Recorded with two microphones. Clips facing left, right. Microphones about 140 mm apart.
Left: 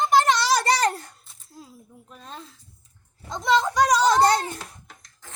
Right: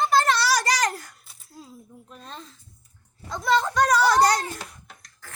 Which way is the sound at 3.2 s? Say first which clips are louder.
Left 1 dB; 20° left (ahead or behind).